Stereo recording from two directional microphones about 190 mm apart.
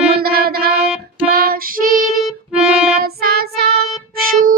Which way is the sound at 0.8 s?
5° right (ahead or behind).